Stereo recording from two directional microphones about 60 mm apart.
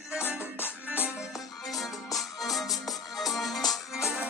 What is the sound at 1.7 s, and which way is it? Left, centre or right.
Music, centre.